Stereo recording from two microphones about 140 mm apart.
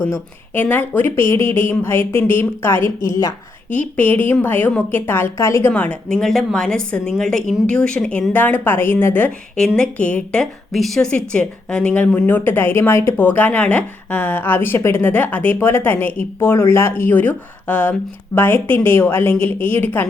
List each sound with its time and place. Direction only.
0.5 s a woman's voice: 15° left (ahead or behind)
1.5 s a sound: 40° right (ahead or behind)
1.8 s a woman's voice: 15° left (ahead or behind)
3.8 s a woman's voice: 10° left (ahead or behind)
5.7 s a woman's voice: 10° left (ahead or behind)